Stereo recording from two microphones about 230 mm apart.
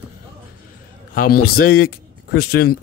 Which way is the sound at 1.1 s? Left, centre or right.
Left.